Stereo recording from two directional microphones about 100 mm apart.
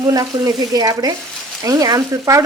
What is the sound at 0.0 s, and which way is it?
A woman's voice, 40° right (ahead or behind).